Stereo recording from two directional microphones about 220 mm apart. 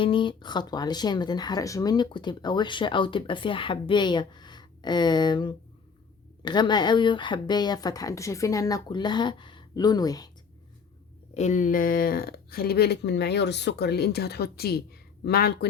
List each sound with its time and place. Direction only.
0.0 s speech: 25° left (ahead or behind)
11.3 s speech: 35° left (ahead or behind)